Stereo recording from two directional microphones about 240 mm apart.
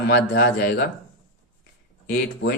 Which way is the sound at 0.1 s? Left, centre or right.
Left.